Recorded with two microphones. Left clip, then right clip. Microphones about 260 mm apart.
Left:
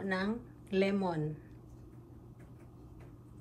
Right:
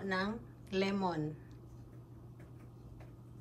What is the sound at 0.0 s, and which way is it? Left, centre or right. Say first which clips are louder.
Speech: left 1 dB; centre.